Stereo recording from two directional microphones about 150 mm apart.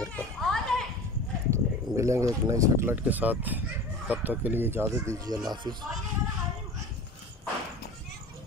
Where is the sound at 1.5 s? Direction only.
20° right (ahead or behind).